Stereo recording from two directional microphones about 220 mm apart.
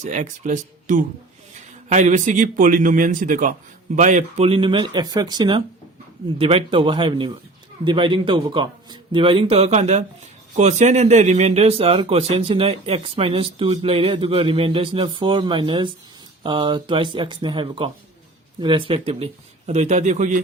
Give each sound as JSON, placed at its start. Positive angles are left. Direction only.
{"t": 0.0, "sound": "speech", "side_deg": -35}